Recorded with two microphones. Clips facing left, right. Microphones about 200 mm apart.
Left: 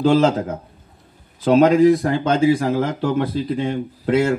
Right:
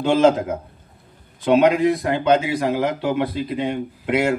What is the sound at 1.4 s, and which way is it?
A man's voice, 40° left (ahead or behind).